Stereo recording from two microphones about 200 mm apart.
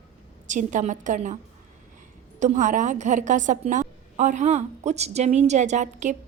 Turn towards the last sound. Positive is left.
turn(degrees=-35)  # may be behind; listen again after turning